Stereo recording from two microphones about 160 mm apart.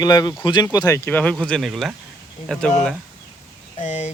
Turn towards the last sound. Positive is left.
turn(degrees=45)  # may be behind; listen again after turning